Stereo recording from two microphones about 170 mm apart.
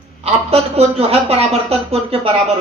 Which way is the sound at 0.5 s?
35° right (ahead or behind).